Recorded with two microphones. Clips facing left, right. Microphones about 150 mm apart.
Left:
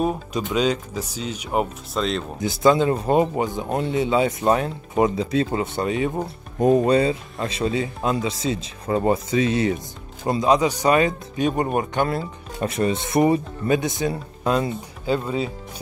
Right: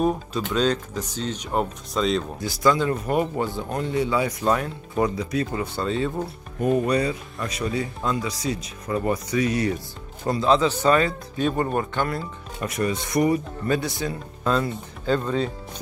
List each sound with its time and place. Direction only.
0.5 s speech: 10° left (ahead or behind)
2.4 s speech: 25° left (ahead or behind)
6.6 s speech: 35° left (ahead or behind)
12.5 s speech: 30° left (ahead or behind); by 15.5 s 10° left (ahead or behind)